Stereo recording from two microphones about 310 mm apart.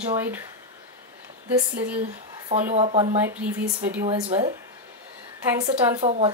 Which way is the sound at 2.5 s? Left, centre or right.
Right.